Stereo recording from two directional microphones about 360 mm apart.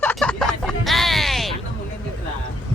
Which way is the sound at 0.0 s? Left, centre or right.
Centre.